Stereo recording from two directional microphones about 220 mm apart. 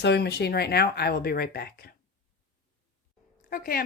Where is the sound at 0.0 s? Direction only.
50° left (ahead or behind).